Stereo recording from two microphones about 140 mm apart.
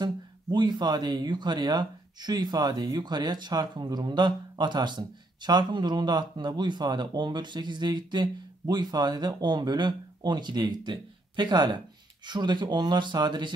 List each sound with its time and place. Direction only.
0.0 s speech: 30° right (ahead or behind)